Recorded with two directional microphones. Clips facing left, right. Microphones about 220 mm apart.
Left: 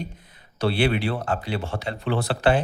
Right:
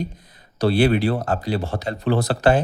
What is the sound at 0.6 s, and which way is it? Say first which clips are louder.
Speech: right 5 dB; 40° right (ahead or behind).